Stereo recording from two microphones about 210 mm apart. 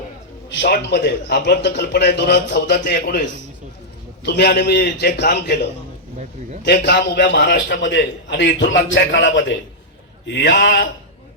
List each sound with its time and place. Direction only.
0.6 s speech: 55° left (ahead or behind)
4.3 s speech: 55° left (ahead or behind)
6.8 s a man's voice: 55° left (ahead or behind)